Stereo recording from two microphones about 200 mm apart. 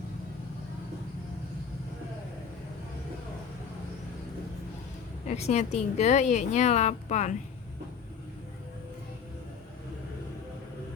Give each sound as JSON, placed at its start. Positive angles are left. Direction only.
{"t": 5.3, "sound": "a woman's voice", "side_deg": 35}